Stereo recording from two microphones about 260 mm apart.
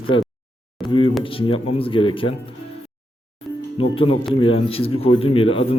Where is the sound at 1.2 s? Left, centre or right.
Left.